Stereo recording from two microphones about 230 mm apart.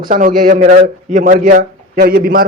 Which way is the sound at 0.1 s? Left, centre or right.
Right.